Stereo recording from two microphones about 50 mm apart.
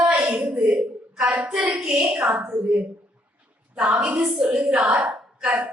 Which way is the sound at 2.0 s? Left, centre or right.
Right.